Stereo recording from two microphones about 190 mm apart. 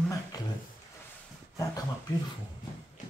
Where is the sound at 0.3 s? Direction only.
20° left (ahead or behind).